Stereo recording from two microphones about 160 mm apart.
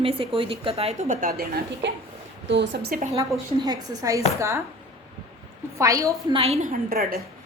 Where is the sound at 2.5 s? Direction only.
90° right.